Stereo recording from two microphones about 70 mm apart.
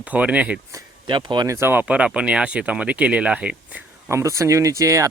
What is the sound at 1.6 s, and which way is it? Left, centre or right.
Speech, right.